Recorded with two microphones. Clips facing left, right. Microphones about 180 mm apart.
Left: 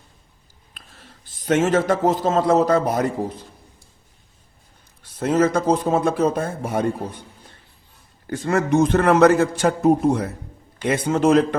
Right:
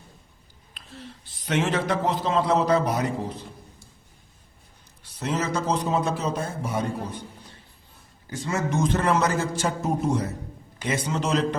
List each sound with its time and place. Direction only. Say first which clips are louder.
0.7 s a man's voice: right 7 dB; 45° left (ahead or behind)
5.0 s a man's voice: left 9 dB; 50° left (ahead or behind)
8.3 s a man's voice: left 8 dB; 60° left (ahead or behind)